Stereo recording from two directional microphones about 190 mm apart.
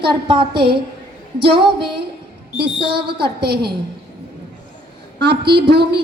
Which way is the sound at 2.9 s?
55° right (ahead or behind).